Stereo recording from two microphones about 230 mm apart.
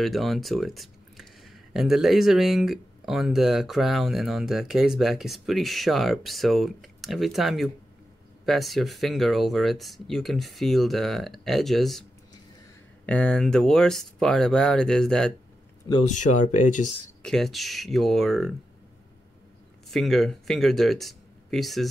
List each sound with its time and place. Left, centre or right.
0.0 s speech: centre
13.0 s speech: centre
16.1 s speech: left
17.2 s speech: centre
19.9 s speech: centre